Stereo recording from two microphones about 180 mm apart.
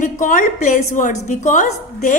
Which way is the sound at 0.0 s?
45° left (ahead or behind).